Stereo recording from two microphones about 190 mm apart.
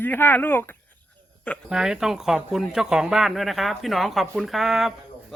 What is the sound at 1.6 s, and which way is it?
Speech, 5° right (ahead or behind).